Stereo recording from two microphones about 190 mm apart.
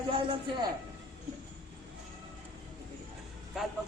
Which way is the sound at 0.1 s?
30° right (ahead or behind).